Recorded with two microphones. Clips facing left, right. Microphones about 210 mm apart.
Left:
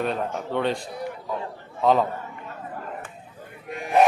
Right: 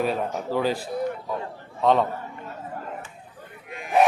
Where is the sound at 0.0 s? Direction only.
5° right (ahead or behind).